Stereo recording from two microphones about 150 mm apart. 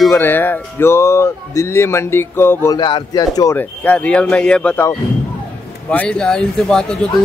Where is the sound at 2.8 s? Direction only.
30° left (ahead or behind).